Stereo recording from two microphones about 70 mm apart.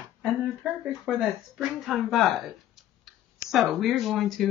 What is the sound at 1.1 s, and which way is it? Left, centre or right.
Speech, centre.